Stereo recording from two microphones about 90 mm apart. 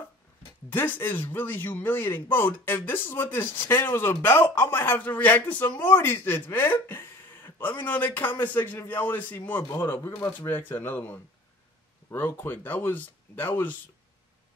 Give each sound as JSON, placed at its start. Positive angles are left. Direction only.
{"t": 0.7, "sound": "speech", "side_deg": 20}